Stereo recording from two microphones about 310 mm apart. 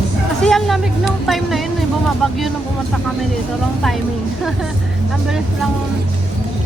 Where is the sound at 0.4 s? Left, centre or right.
Centre.